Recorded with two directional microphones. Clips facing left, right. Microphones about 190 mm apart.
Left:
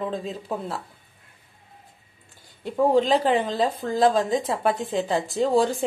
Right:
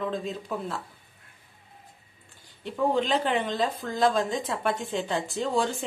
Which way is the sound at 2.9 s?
35° left (ahead or behind).